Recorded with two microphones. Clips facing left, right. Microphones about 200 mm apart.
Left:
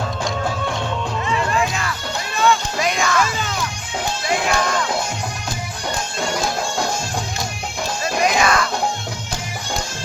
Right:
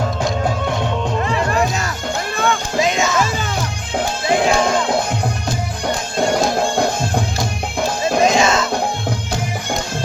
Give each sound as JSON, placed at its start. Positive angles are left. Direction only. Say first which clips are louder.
{"t": 1.2, "sound": "music", "louder": "right 1 dB", "side_deg": -45}
{"t": 2.3, "sound": "music", "louder": "left 3 dB", "side_deg": -55}
{"t": 2.7, "sound": "music", "louder": "right 3 dB", "side_deg": -25}
{"t": 3.3, "sound": "music", "louder": "right 3 dB", "side_deg": -40}
{"t": 4.3, "sound": "music", "louder": "right 5 dB", "side_deg": -25}
{"t": 6.1, "sound": "music", "louder": "right 8 dB", "side_deg": -55}
{"t": 8.2, "sound": "music", "louder": "right 2 dB", "side_deg": -25}